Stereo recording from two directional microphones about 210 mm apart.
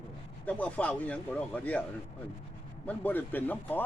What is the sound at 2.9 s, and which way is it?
Speech, 10° left (ahead or behind).